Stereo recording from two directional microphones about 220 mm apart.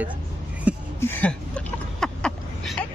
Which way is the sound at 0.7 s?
5° right (ahead or behind).